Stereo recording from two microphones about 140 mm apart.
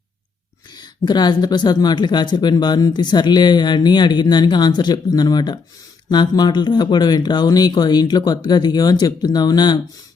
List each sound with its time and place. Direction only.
0.8 s speech: 30° left (ahead or behind)